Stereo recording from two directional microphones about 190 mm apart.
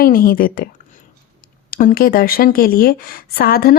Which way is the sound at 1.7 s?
45° left (ahead or behind).